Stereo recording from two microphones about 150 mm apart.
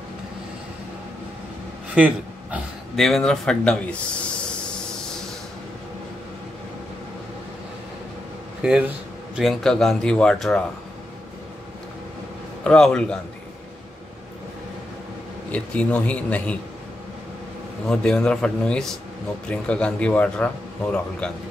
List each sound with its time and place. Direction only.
2.0 s a sound: 10° right (ahead or behind)
3.0 s speech: centre (ahead or behind)
8.6 s speech: 5° right (ahead or behind)
12.6 s speech: 5° left (ahead or behind)
15.5 s a man's voice: 10° left (ahead or behind)
17.8 s a man's voice: 5° left (ahead or behind)